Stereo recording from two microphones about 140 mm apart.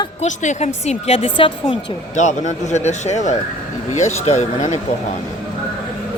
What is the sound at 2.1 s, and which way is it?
A man's voice, 55° left (ahead or behind).